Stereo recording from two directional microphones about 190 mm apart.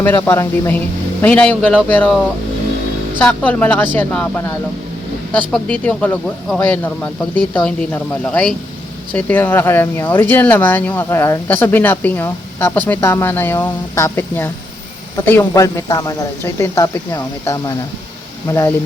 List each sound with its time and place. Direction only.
0.3 s speech: 15° left (ahead or behind)
3.2 s speech: 10° left (ahead or behind)